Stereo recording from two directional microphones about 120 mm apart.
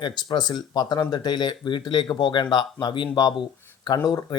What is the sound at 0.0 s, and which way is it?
Speech, 40° left (ahead or behind).